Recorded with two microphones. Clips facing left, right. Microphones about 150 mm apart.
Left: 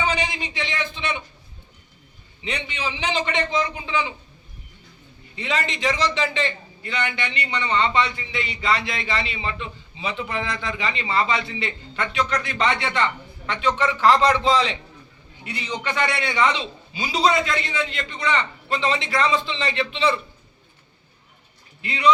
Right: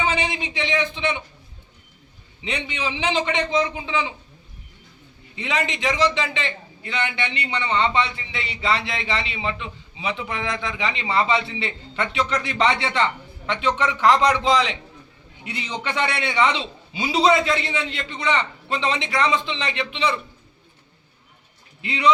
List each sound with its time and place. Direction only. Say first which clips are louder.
0.0 s a man's voice: right 1 dB; 25° right (ahead or behind)
2.4 s a man's voice: right 1 dB; 20° right (ahead or behind)
5.4 s a man's voice: even; 15° right (ahead or behind)
21.8 s a man's voice: even; 20° right (ahead or behind)